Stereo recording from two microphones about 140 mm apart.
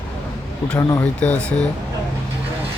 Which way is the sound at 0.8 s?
25° left (ahead or behind).